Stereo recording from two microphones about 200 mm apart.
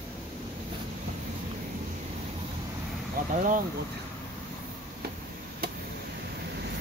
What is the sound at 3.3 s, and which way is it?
Speech, 40° right (ahead or behind).